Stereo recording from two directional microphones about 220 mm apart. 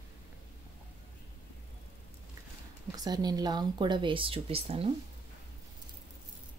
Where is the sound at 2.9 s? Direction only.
15° right (ahead or behind).